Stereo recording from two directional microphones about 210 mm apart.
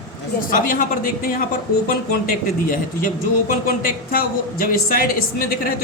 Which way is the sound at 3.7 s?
40° left (ahead or behind).